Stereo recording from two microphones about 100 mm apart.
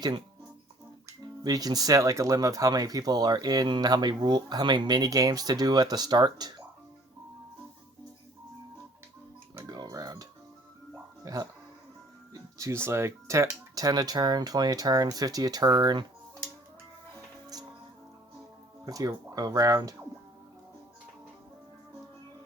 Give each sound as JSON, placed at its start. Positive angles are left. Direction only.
{"t": 1.0, "sound": "speech", "side_deg": -40}
{"t": 9.6, "sound": "music", "side_deg": -40}
{"t": 12.3, "sound": "speech", "side_deg": -30}
{"t": 17.5, "sound": "music", "side_deg": -40}
{"t": 18.9, "sound": "speech", "side_deg": -35}